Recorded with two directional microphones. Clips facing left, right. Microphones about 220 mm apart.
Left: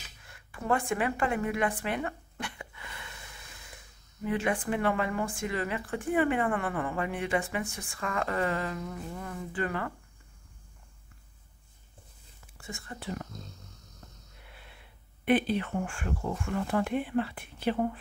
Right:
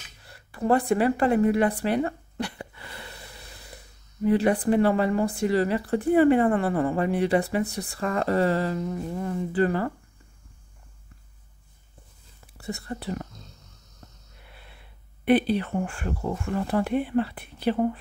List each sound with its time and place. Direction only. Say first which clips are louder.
0.2 s speech: right 10 dB; 35° right (ahead or behind)
12.5 s speech: right 9 dB; 35° right (ahead or behind)
15.2 s speech: right 5 dB; 35° right (ahead or behind)